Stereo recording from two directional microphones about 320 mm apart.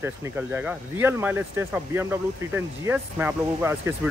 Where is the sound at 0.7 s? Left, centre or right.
Centre.